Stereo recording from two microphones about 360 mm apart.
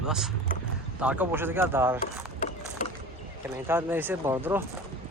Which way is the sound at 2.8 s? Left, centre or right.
Left.